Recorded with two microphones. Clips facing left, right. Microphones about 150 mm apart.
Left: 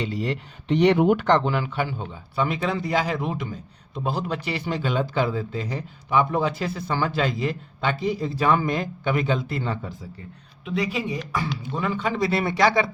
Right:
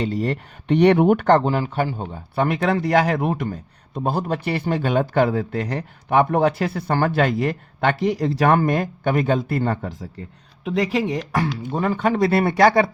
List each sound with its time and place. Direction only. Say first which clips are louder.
0.0 s a man's voice: right 4 dB; 50° right (ahead or behind)
10.7 s speech: right 5 dB; 90° right
11.6 s speech: right 6 dB; 50° right (ahead or behind)